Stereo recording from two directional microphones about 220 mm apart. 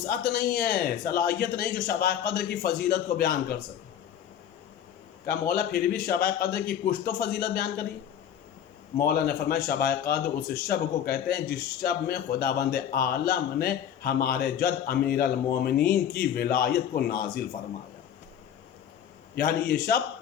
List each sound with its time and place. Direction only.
0.0 s a man's voice: 40° left (ahead or behind)
5.2 s a man's voice: 45° left (ahead or behind)
9.0 s a man's voice: 45° left (ahead or behind)
19.4 s a man's voice: 45° left (ahead or behind)